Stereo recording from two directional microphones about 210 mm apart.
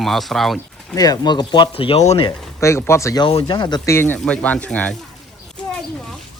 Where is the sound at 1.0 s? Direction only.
20° left (ahead or behind).